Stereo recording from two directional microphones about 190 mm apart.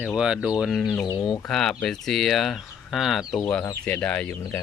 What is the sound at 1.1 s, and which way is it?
Speech, 20° left (ahead or behind).